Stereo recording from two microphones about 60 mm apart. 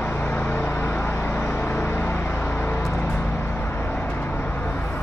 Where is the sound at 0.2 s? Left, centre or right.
Left.